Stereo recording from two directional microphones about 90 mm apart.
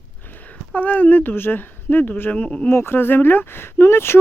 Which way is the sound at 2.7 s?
25° left (ahead or behind).